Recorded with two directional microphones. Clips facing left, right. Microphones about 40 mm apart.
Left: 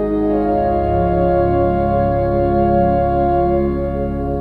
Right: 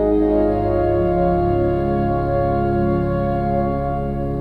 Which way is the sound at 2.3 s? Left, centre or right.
Centre.